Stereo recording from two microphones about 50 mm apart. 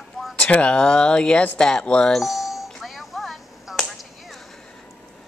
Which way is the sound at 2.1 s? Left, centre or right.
Centre.